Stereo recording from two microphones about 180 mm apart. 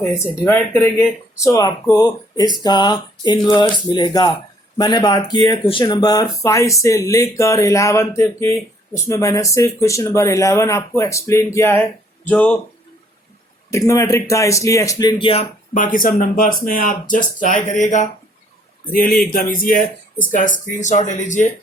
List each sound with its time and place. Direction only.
0.0 s speech: 10° left (ahead or behind)
13.7 s speech: 15° left (ahead or behind)
15.7 s speech: 50° left (ahead or behind)
18.9 s speech: 55° left (ahead or behind)